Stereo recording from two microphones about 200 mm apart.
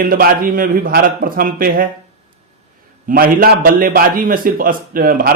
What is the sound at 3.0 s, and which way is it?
Speech, 45° right (ahead or behind).